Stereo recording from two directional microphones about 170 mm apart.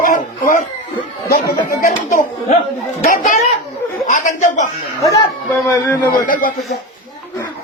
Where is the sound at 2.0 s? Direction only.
45° left (ahead or behind).